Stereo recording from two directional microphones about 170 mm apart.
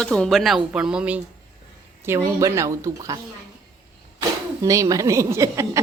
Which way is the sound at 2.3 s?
20° right (ahead or behind).